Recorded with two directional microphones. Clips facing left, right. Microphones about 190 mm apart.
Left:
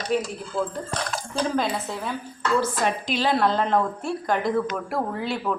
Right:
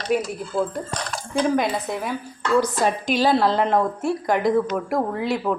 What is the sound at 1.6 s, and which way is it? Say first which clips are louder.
Speech: right 3 dB; 15° right (ahead or behind).